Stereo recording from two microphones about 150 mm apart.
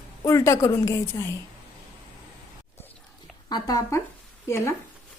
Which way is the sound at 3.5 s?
25° left (ahead or behind).